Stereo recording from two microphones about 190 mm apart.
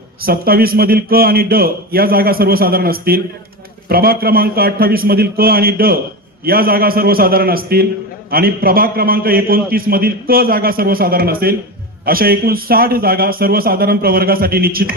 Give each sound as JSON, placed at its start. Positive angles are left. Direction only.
{"t": 0.2, "sound": "a man's voice", "side_deg": -50}